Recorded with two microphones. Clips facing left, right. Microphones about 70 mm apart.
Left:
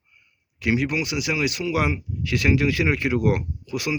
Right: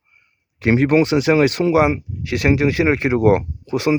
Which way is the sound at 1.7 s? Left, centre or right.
Right.